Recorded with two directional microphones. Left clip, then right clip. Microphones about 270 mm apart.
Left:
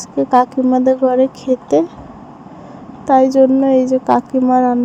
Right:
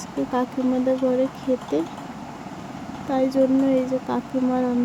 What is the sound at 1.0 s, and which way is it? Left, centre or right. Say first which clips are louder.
Speech: left 9 dB; centre.